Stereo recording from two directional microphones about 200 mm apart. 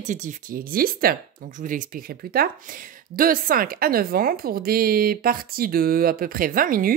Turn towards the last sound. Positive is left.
turn(degrees=-45)  # may be behind; listen again after turning